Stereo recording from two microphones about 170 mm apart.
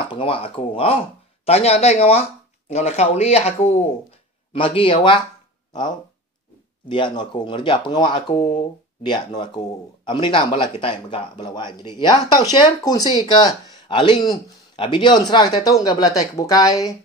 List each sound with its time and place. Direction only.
0.1 s speech: 30° left (ahead or behind)